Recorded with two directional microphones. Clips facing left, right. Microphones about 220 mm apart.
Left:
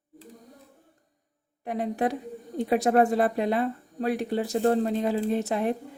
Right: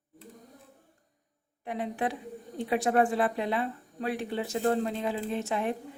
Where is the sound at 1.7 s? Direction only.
40° left (ahead or behind).